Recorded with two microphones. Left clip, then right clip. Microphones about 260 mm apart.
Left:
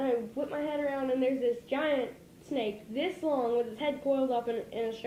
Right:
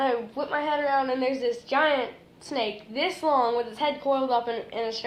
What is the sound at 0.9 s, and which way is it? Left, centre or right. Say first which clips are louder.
A woman's voice: right 5 dB; right.